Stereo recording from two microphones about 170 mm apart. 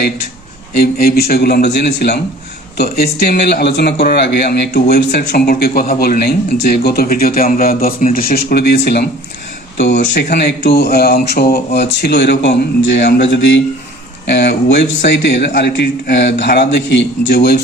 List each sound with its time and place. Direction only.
0.8 s a man's voice: 65° left (ahead or behind)
10.2 s a man's voice: 75° left (ahead or behind); by 16.8 s 90° left
17.2 s speech: 70° left (ahead or behind)